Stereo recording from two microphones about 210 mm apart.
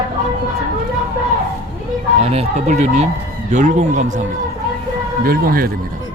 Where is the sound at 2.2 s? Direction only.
30° right (ahead or behind).